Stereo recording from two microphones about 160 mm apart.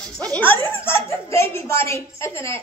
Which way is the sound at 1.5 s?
15° left (ahead or behind).